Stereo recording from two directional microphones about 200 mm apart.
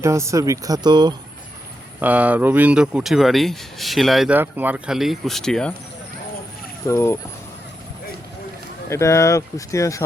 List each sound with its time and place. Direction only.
0.0 s speech: 15° right (ahead or behind)
2.0 s speech: 10° right (ahead or behind)
6.8 s speech: 15° left (ahead or behind)
8.9 s speech: 15° left (ahead or behind)